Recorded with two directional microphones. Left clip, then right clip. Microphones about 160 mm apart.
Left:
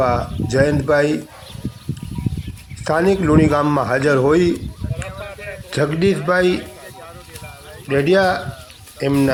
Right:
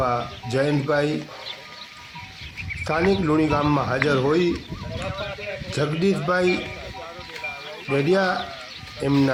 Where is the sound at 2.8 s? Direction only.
25° left (ahead or behind).